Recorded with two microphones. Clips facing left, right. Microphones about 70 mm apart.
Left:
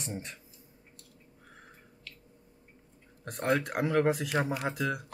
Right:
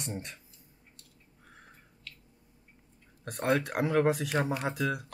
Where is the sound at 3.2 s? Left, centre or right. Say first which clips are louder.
Right 1 dB; centre.